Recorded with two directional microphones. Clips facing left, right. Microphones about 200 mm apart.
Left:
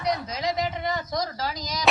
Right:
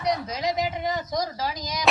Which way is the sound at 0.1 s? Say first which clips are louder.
Right 1 dB; 10° right (ahead or behind).